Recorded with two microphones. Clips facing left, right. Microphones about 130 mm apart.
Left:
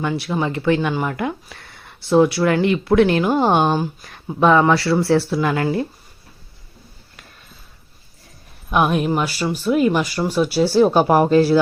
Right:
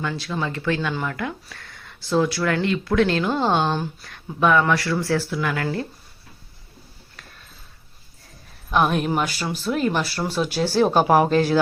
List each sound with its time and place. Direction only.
0.0 s speech: 20° left (ahead or behind)
4.3 s speech: 30° left (ahead or behind)
8.7 s speech: 5° left (ahead or behind)